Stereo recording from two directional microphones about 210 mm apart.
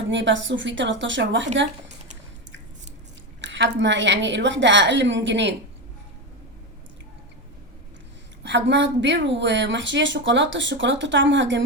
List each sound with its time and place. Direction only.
0.1 s a woman's voice: 60° right (ahead or behind)
3.4 s a woman's voice: 60° right (ahead or behind)
8.4 s a woman's voice: 55° right (ahead or behind)